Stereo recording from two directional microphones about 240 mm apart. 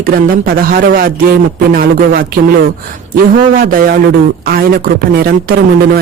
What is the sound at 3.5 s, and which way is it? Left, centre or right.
A man's voice, right.